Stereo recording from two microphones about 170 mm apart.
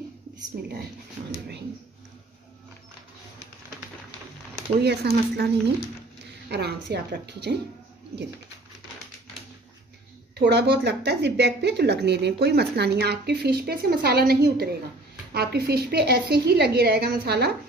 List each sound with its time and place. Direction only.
4.8 s a woman's voice: 75° right (ahead or behind)
10.3 s speech: 75° right (ahead or behind)